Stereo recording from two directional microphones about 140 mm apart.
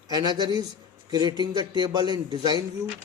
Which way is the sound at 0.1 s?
30° right (ahead or behind).